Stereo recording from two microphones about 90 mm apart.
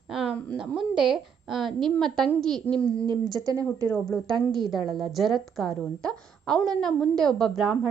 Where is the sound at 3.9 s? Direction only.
5° left (ahead or behind).